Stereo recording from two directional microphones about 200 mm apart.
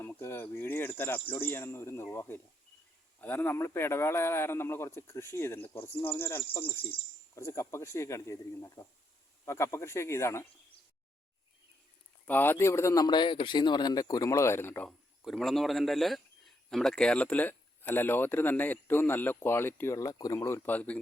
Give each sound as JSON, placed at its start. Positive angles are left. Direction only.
{"t": 0.0, "sound": "speech", "side_deg": 10}
{"t": 12.2, "sound": "a man's voice", "side_deg": 10}